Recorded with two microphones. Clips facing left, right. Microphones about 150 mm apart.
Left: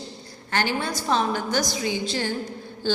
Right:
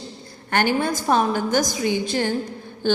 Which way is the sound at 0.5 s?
50° right (ahead or behind).